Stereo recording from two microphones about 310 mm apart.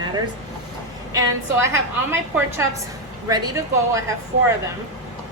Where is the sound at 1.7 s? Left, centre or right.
Centre.